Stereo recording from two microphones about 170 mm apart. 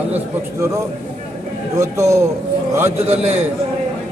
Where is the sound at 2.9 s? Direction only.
40° right (ahead or behind).